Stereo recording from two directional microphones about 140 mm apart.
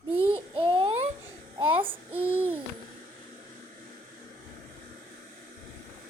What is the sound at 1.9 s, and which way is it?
Child singing, 15° right (ahead or behind).